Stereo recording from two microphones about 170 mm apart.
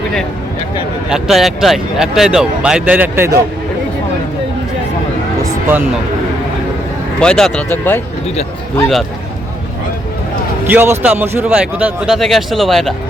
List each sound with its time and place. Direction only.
1.1 s speech: centre (ahead or behind)
5.4 s a sound: 15° right (ahead or behind)
7.2 s speech: 5° left (ahead or behind)
10.7 s speech: 10° right (ahead or behind)